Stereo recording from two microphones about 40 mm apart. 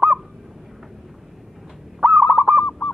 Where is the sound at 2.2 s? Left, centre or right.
Right.